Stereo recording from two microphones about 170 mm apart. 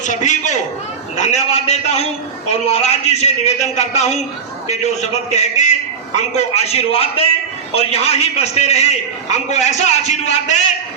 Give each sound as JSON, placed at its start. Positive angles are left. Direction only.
{"t": 0.0, "sound": "a man's voice", "side_deg": 45}